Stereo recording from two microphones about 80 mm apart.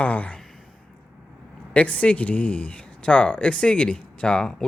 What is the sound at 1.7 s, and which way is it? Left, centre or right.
Speech, centre.